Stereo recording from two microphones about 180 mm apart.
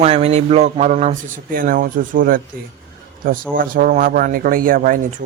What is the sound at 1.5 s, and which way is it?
Speech, 55° right (ahead or behind).